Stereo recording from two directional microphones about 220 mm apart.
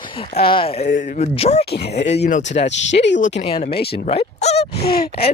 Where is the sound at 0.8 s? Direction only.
40° left (ahead or behind).